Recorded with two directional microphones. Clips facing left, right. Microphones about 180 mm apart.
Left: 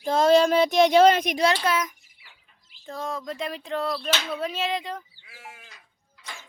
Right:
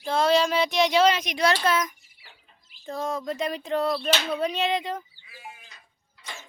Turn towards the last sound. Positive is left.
turn(degrees=80)